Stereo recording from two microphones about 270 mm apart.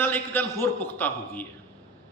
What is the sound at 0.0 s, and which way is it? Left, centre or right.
A man's voice, centre.